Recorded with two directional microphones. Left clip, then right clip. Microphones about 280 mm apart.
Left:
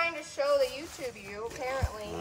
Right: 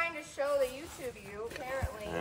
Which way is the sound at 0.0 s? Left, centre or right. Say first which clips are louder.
Left 4 dB; left.